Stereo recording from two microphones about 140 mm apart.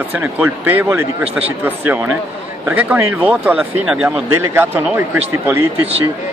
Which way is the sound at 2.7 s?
10° right (ahead or behind).